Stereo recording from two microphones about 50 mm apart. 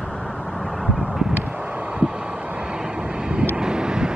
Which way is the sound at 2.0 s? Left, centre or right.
Centre.